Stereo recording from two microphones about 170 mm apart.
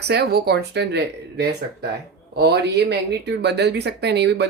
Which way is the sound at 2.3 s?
75° right (ahead or behind).